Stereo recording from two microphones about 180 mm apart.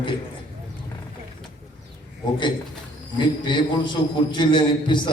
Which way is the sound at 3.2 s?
25° left (ahead or behind).